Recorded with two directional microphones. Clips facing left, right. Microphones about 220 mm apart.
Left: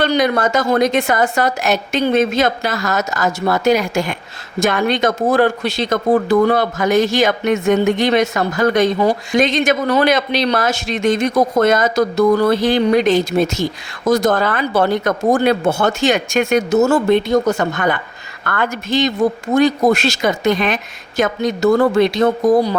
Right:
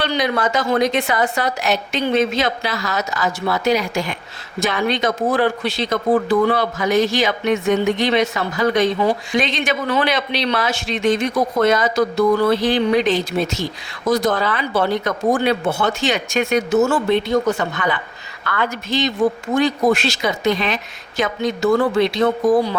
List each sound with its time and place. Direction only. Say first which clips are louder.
0.0 s a woman's voice: left 4 dB; 45° left (ahead or behind)